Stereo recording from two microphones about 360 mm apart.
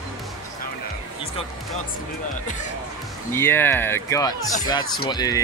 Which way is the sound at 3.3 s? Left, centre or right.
Centre.